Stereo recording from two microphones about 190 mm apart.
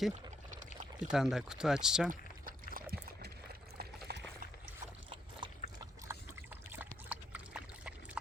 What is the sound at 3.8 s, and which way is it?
Liquid, 55° right (ahead or behind).